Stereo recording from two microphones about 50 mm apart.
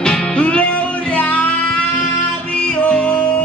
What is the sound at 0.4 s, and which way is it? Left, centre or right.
Music, left.